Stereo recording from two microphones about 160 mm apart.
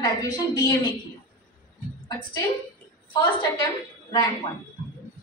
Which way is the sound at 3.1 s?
30° left (ahead or behind).